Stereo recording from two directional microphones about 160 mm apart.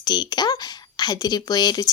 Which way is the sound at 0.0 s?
25° left (ahead or behind).